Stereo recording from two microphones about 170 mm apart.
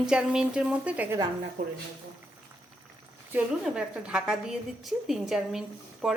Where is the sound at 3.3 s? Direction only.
5° right (ahead or behind).